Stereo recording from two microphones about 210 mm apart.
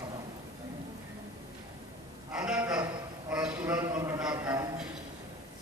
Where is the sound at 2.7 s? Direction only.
15° right (ahead or behind).